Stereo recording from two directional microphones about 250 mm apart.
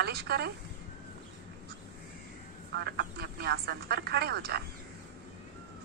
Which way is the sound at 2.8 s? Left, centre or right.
Right.